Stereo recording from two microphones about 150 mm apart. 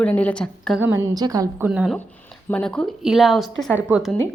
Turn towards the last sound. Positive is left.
turn(degrees=-5)  # may be behind; listen again after turning